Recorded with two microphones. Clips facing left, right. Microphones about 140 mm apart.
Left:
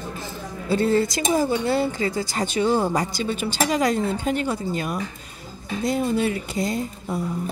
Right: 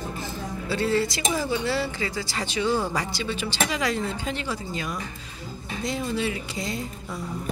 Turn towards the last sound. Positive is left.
turn(degrees=50)  # may be behind; listen again after turning